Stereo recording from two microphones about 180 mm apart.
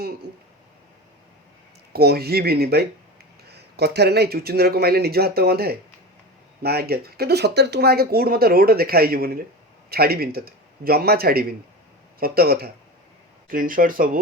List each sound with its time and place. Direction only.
1.9 s speech: 60° right (ahead or behind)